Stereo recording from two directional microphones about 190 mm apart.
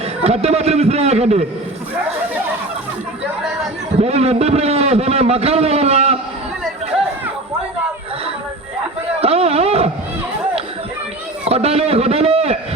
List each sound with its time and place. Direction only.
0.2 s a man's voice: 35° right (ahead or behind)
4.0 s a man's voice: 35° right (ahead or behind)
9.2 s a sound: 30° right (ahead or behind)
11.4 s a man's voice: 30° right (ahead or behind)